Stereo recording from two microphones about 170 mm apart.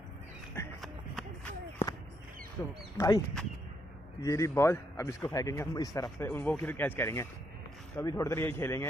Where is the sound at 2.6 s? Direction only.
15° left (ahead or behind).